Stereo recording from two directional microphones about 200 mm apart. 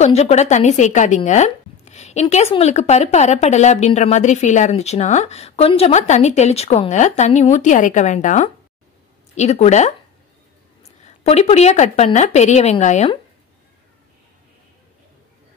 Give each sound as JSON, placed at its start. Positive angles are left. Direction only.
{"t": 0.0, "sound": "a woman's voice", "side_deg": 35}